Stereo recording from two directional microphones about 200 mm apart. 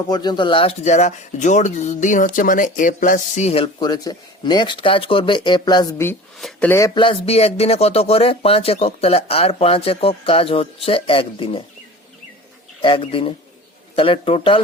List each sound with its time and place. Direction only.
0.1 s speech: 20° left (ahead or behind)
12.8 s speech: 25° left (ahead or behind)